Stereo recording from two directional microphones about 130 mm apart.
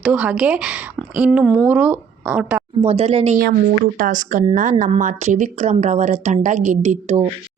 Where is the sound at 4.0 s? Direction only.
90° right.